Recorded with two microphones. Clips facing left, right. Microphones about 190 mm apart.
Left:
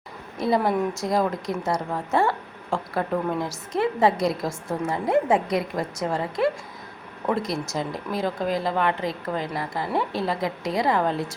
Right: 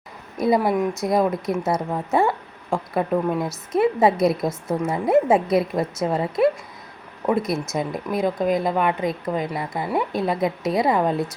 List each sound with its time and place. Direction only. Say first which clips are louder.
0.3 s speech: right 3 dB; 20° right (ahead or behind)
0.6 s speech: right 2 dB; 5° right (ahead or behind)
1.1 s a woman's voice: right 4 dB; 20° right (ahead or behind)
7.4 s speech: right 3 dB; centre (ahead or behind)
7.8 s a woman's voice: right 4 dB; 20° right (ahead or behind)